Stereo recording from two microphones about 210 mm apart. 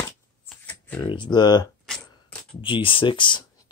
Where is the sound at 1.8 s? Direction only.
5° left (ahead or behind).